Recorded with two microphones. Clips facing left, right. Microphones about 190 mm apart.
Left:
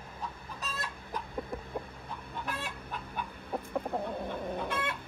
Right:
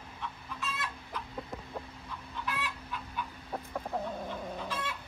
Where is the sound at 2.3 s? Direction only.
50° left (ahead or behind).